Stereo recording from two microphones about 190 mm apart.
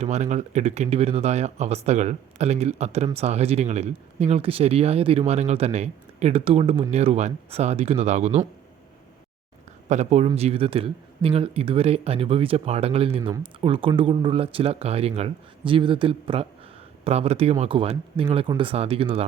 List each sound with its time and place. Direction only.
0.0 s speech: 35° right (ahead or behind)
9.9 s speech: 35° right (ahead or behind)